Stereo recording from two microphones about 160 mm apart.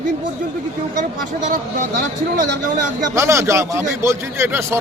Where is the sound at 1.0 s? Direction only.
55° right (ahead or behind).